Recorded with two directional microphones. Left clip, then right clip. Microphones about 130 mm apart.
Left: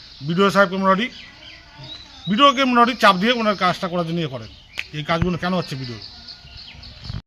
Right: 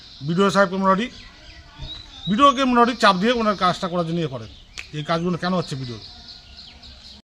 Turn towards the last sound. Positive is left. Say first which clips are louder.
# left 1 dB
turn(degrees=-20)  # may be behind; listen again after turning